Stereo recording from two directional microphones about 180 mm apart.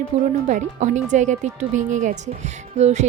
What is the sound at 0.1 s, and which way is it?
A woman's voice, 35° right (ahead or behind).